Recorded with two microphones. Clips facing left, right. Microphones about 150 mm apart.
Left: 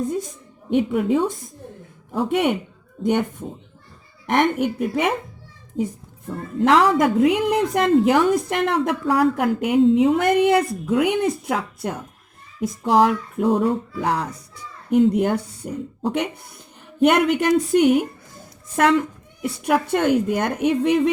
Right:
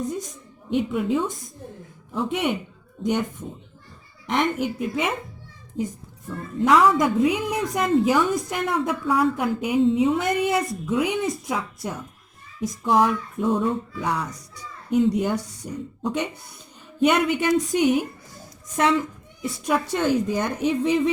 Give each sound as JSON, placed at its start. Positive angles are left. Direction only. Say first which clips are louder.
{"t": 0.7, "sound": "a woman's voice", "louder": "left 4 dB", "side_deg": 60}
{"t": 4.3, "sound": "a woman's voice", "louder": "left 4 dB", "side_deg": 60}
{"t": 6.7, "sound": "a woman's voice", "louder": "left 2 dB", "side_deg": 65}
{"t": 17.0, "sound": "a woman's voice", "louder": "left 3 dB", "side_deg": 60}